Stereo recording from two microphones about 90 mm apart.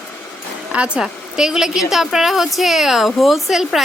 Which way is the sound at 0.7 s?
10° right (ahead or behind).